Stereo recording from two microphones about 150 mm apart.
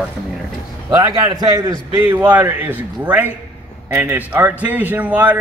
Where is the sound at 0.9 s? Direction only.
25° right (ahead or behind).